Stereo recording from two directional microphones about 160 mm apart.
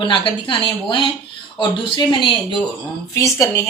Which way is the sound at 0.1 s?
30° left (ahead or behind).